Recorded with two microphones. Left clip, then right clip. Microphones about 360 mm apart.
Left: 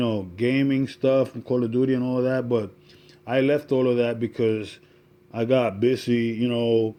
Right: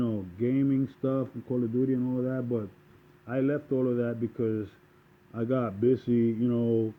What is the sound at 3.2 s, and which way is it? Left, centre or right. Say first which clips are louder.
Speech: left 8 dB; centre.